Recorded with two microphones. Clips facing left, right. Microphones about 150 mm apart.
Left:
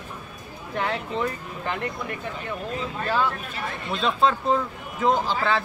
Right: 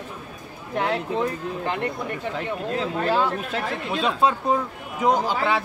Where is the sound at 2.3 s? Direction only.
90° right.